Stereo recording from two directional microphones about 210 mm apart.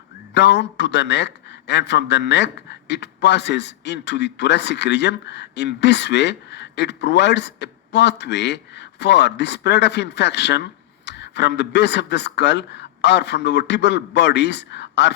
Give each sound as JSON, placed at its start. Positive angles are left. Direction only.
{"t": 0.3, "sound": "a man's voice", "side_deg": 55}